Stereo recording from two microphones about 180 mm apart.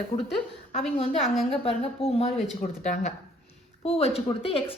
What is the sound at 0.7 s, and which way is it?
Speech, 35° left (ahead or behind).